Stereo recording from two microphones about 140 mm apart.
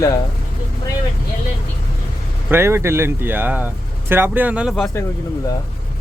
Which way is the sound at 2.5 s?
15° right (ahead or behind).